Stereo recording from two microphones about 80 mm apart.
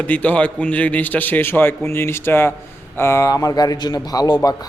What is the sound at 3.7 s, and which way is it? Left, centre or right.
Speech, left.